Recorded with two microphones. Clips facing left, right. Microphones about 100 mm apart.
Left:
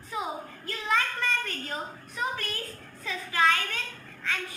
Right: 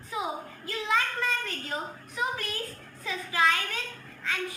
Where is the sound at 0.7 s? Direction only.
5° right (ahead or behind).